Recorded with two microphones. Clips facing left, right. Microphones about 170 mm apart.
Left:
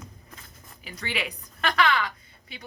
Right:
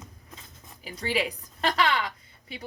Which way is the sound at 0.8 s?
35° right (ahead or behind).